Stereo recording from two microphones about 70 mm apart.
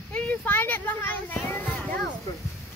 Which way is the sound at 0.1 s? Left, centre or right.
Left.